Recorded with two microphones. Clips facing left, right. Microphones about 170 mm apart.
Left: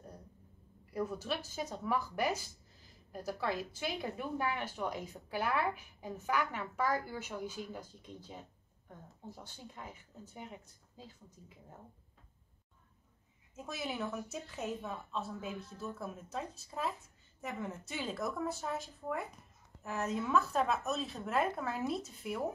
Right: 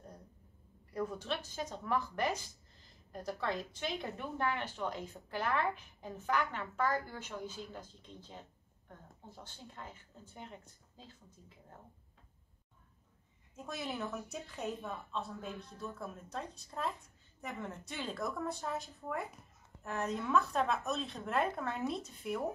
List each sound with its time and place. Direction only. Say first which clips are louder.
0.9 s a woman's voice: left 1 dB; 5° left (ahead or behind)
13.6 s speech: left 1 dB; 5° left (ahead or behind)